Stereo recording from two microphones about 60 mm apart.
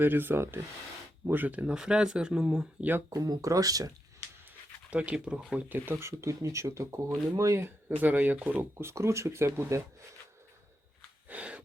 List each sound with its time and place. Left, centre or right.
0.0 s speech: right
1.3 s speech: right
1.6 s speech: centre
3.1 s speech: right
4.9 s speech: right
5.5 s speech: right
6.1 s speech: right
7.9 s speech: right
8.8 s speech: right
11.3 s a sound: right